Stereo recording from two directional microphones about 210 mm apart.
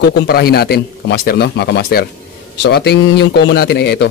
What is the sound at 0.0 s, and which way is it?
A man's voice, 50° left (ahead or behind).